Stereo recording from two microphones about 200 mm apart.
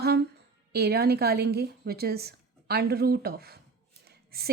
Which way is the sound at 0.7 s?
55° right (ahead or behind).